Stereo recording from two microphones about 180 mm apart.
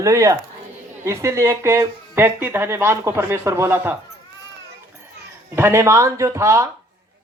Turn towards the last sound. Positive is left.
turn(degrees=-15)  # may be behind; listen again after turning